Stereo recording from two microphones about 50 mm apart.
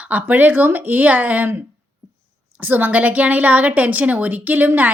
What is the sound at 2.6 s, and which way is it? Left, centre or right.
A woman's voice, right.